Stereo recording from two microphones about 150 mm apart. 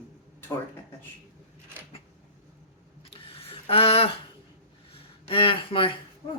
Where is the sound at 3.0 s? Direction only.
35° left (ahead or behind).